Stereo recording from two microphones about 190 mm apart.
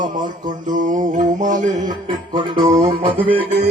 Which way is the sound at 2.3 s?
25° right (ahead or behind).